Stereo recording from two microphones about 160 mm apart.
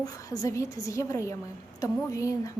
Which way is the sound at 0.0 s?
20° left (ahead or behind).